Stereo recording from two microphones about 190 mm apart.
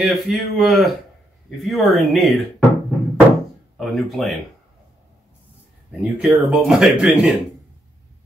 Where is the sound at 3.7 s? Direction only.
Centre (ahead or behind).